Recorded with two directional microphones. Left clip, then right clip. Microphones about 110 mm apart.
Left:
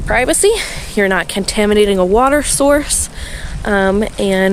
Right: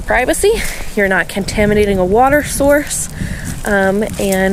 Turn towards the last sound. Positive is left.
turn(degrees=50)  # may be behind; listen again after turning